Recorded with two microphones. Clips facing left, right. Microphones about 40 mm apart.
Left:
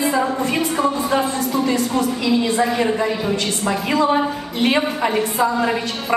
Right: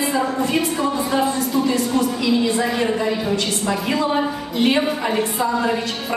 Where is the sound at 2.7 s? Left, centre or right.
Centre.